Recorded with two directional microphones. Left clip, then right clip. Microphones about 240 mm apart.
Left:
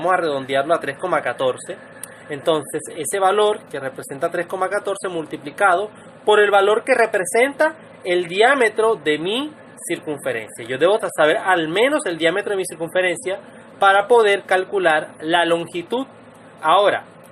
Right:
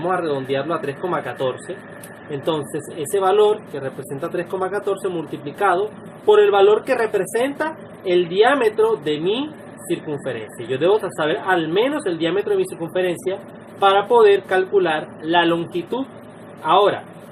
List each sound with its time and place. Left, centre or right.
0.1 s a woman's voice: left
4.7 s a woman's voice: left